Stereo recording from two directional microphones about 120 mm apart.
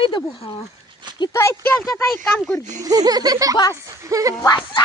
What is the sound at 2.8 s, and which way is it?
Speech, 30° right (ahead or behind).